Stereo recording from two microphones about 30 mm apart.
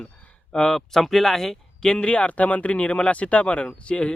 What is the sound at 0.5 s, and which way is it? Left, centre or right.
Speech, left.